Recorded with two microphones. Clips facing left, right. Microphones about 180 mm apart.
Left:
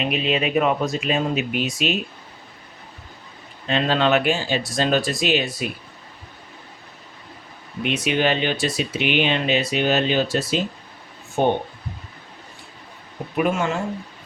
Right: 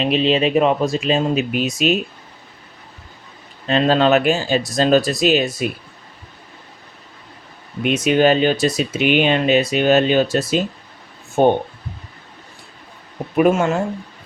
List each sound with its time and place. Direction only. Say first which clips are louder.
0.0 s speech: right 6 dB; 30° right (ahead or behind)
3.7 s speech: right 5 dB; 40° right (ahead or behind)
7.9 s speech: right 6 dB; 45° right (ahead or behind)
13.3 s speech: right 7 dB; 45° right (ahead or behind)